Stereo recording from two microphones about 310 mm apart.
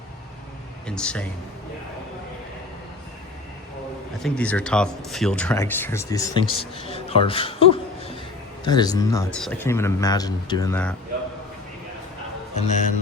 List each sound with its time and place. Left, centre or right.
0.9 s speech: centre
4.2 s speech: centre
12.5 s a man's voice: left